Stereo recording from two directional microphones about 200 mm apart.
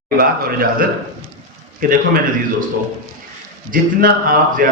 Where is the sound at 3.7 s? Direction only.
45° right (ahead or behind).